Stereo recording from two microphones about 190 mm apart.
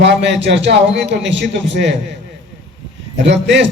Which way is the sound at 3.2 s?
65° right (ahead or behind).